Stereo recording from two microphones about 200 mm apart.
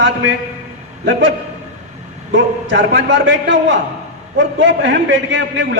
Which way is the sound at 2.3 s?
65° right (ahead or behind).